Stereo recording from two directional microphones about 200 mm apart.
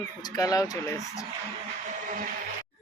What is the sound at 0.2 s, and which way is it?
Speech, 20° left (ahead or behind).